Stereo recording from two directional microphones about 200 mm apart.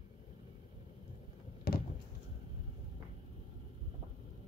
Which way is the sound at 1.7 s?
50° left (ahead or behind).